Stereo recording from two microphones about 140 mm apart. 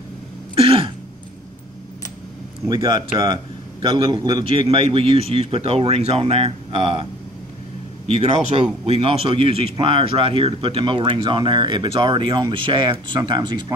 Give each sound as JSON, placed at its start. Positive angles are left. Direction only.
{"t": 0.6, "sound": "throat clearing", "side_deg": -40}
{"t": 2.7, "sound": "a man's voice", "side_deg": -35}
{"t": 8.1, "sound": "a man's voice", "side_deg": -45}